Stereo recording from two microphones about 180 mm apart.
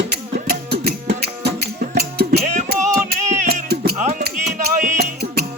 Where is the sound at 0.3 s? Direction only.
65° right (ahead or behind).